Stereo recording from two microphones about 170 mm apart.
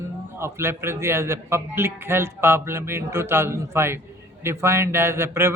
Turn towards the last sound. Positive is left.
turn(degrees=-15)  # may be behind; listen again after turning